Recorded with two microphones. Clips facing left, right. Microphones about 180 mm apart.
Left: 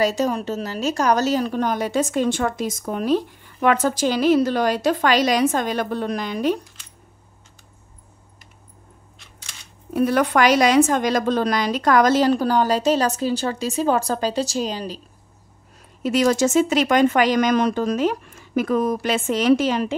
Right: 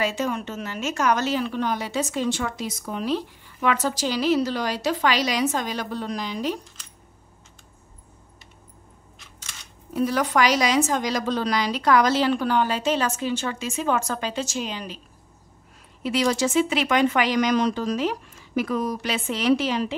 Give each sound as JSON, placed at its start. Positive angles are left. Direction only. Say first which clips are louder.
{"t": 0.0, "sound": "a woman's voice", "louder": "left 5 dB", "side_deg": 40}
{"t": 9.9, "sound": "a woman's voice", "louder": "left 4 dB", "side_deg": 60}
{"t": 16.0, "sound": "a woman's voice", "louder": "left 4 dB", "side_deg": 45}